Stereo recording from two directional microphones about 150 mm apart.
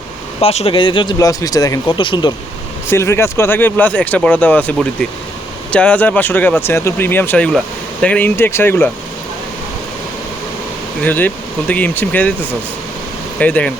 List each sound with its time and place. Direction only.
0.4 s speech: 40° left (ahead or behind)
2.9 s speech: 20° left (ahead or behind)
11.0 s speech: 10° left (ahead or behind)